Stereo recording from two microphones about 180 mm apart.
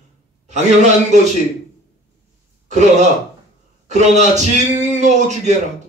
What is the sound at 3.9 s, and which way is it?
Speech, 40° right (ahead or behind).